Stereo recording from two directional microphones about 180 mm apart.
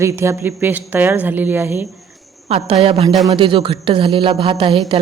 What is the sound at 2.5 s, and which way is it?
A woman's voice, 35° right (ahead or behind).